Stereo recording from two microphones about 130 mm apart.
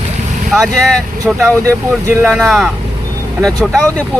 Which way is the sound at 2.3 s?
Centre (ahead or behind).